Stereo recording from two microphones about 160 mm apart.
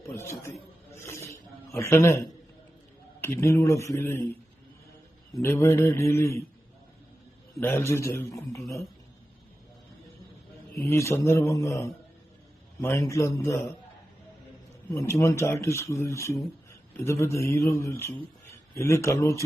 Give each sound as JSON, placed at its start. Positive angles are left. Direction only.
{"t": 0.0, "sound": "a sound", "side_deg": 15}
{"t": 3.2, "sound": "a man's voice", "side_deg": 15}
{"t": 5.4, "sound": "a man's voice", "side_deg": 15}
{"t": 7.6, "sound": "a man's voice", "side_deg": 15}
{"t": 10.8, "sound": "a man's voice", "side_deg": 20}
{"t": 14.8, "sound": "a man's voice", "side_deg": 15}